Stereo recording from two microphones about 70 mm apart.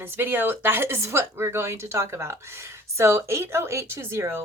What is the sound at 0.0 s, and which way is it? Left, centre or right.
Speech, right.